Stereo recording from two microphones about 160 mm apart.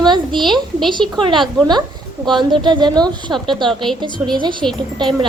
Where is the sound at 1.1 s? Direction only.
30° right (ahead or behind).